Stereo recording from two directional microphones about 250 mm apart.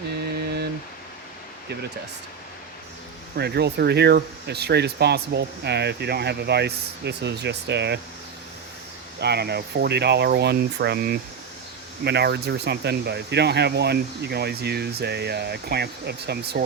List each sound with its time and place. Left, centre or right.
3.3 s speech: right
9.2 s speech: right